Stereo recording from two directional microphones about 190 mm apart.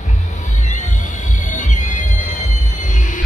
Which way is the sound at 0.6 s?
40° left (ahead or behind).